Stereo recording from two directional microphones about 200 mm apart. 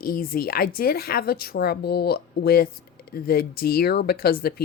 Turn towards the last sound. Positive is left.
turn(degrees=50)  # may be behind; listen again after turning